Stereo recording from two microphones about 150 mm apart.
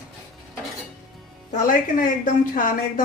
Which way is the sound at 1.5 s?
60° left (ahead or behind).